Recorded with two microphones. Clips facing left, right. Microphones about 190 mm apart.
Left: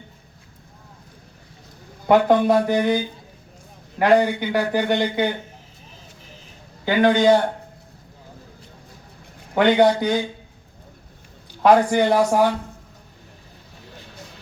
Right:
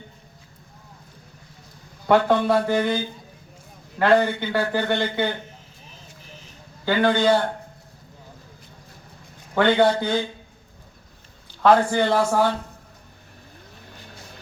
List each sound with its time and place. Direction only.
2.0 s a man's voice: 15° left (ahead or behind)
6.8 s a man's voice: 15° left (ahead or behind)
9.6 s a man's voice: 15° left (ahead or behind)
11.6 s a man's voice: 15° left (ahead or behind)